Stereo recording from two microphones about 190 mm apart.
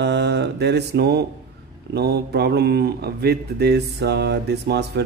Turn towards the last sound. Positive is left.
turn(degrees=-60)  # may be behind; listen again after turning